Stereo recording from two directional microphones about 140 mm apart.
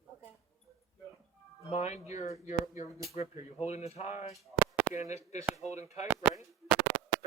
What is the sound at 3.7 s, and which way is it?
Speech, 50° left (ahead or behind).